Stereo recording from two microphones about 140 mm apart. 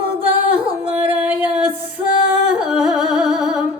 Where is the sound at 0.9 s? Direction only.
10° right (ahead or behind).